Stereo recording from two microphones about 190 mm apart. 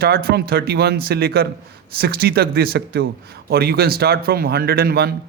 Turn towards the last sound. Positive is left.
turn(degrees=-55)  # may be behind; listen again after turning